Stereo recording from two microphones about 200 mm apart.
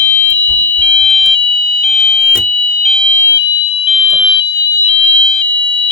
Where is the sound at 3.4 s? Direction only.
30° left (ahead or behind).